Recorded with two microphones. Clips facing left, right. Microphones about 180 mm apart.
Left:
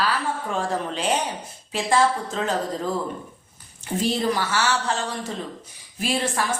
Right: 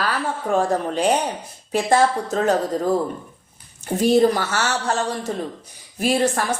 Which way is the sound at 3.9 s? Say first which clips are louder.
Right 7 dB; 45° right (ahead or behind).